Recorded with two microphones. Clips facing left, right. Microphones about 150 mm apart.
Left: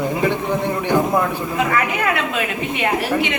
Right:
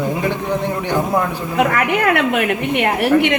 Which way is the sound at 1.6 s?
65° right (ahead or behind).